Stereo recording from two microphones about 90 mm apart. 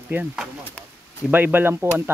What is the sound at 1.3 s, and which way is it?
Speech, 20° right (ahead or behind).